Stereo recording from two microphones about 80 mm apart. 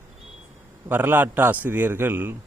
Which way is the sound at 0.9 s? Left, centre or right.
Right.